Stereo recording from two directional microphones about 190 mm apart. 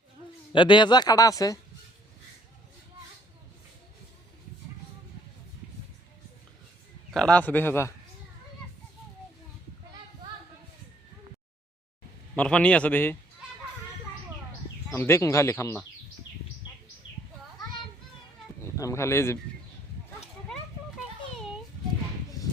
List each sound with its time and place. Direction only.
0.5 s speech: 25° left (ahead or behind)
7.1 s speech: 5° left (ahead or behind)
12.4 s speech: 5° left (ahead or behind)
14.8 s speech: 15° left (ahead or behind)
18.6 s speech: 15° left (ahead or behind)
22.4 s a sound: 15° left (ahead or behind)